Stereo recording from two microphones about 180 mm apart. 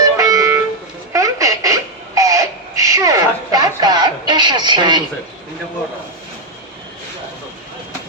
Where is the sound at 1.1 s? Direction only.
15° right (ahead or behind).